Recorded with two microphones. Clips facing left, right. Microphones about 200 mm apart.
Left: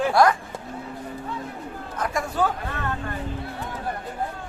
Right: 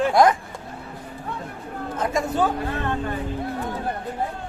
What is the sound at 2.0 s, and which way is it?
Speech, 25° right (ahead or behind).